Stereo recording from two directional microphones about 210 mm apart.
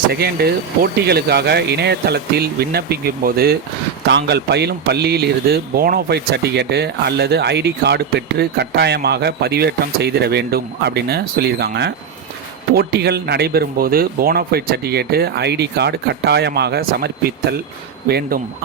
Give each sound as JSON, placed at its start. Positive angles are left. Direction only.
{"t": 0.1, "sound": "speech", "side_deg": -50}